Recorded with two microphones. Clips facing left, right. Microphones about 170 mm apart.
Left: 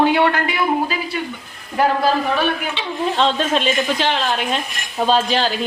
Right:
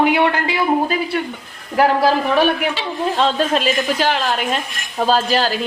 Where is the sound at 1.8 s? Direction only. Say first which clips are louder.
Right 2 dB; 85° right.